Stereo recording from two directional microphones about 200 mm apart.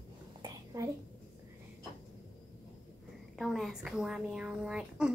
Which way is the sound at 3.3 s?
Centre (ahead or behind).